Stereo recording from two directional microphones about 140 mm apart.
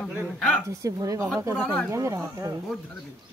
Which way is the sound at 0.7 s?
25° right (ahead or behind).